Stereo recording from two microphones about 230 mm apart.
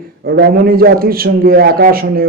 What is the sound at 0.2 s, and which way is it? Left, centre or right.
A man's voice, right.